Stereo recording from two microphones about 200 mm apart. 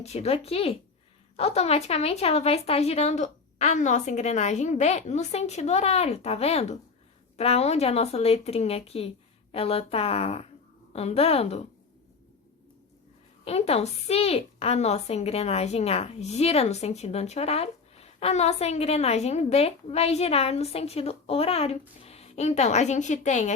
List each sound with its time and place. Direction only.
0.0 s a woman's voice: 30° left (ahead or behind)
13.4 s a woman's voice: 30° left (ahead or behind)